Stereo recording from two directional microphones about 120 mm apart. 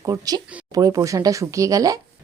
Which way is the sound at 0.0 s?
30° right (ahead or behind).